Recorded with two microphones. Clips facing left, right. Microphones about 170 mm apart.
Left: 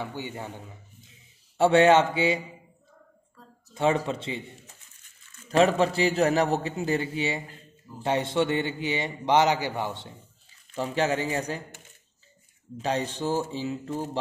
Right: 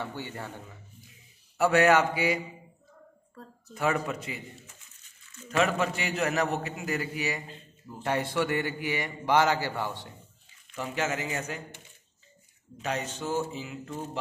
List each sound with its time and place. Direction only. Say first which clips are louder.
0.0 s speech: left 2 dB; 15° left (ahead or behind)
1.0 s a sound: right 1 dB; 25° left (ahead or behind)
3.7 s a man's voice: left 4 dB; 25° left (ahead or behind)
10.7 s a man's voice: left 5 dB; 35° left (ahead or behind)
12.8 s a man's voice: left 5 dB; 30° left (ahead or behind)